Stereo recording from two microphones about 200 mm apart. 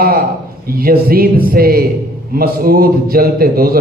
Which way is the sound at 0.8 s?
50° right (ahead or behind).